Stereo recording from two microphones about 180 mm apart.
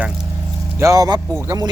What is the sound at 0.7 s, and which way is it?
Speech, 15° right (ahead or behind).